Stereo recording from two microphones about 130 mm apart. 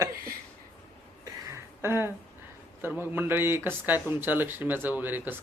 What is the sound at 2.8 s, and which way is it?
Speech, 15° right (ahead or behind).